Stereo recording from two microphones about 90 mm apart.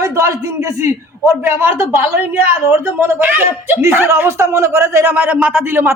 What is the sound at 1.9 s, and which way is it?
Speech, 35° right (ahead or behind).